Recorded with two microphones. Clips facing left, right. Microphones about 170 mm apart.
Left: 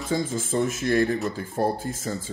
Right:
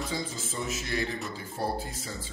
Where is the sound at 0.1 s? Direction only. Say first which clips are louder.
Left 9 dB; 50° left (ahead or behind).